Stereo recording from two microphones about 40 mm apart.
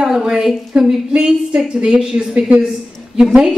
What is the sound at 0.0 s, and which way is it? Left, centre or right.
A woman's voice, centre.